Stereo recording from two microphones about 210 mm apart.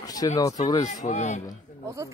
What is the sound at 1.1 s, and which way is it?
Speech, 35° left (ahead or behind).